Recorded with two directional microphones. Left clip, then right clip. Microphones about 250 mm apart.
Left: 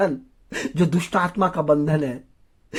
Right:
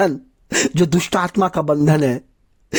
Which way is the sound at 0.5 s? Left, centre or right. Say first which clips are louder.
Right 7 dB; right.